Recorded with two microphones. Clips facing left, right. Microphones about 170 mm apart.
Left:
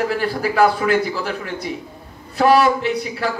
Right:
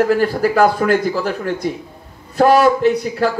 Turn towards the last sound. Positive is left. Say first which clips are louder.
# right 6 dB
turn(degrees=-45)  # may be behind; listen again after turning